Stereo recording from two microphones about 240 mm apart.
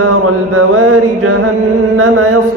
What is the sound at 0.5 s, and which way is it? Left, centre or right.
Mantra, right.